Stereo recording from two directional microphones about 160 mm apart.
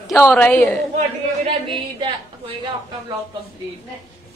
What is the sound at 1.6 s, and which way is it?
Speech, 30° right (ahead or behind).